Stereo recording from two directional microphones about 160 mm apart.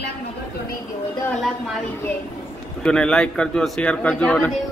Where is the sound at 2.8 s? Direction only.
5° left (ahead or behind).